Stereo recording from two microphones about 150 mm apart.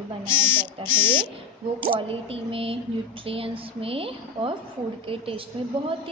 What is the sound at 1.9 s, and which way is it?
A woman's voice, 35° right (ahead or behind).